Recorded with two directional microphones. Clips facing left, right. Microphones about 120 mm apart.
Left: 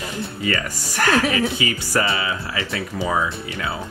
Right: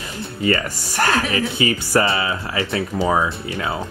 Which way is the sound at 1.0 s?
30° right (ahead or behind).